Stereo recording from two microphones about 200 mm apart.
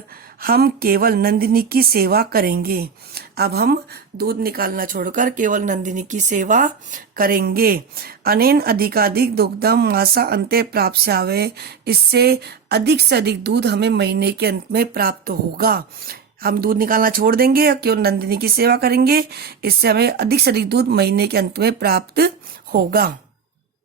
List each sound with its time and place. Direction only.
0.4 s speech: 50° right (ahead or behind)